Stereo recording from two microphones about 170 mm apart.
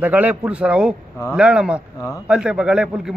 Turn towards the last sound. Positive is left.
turn(degrees=-5)  # may be behind; listen again after turning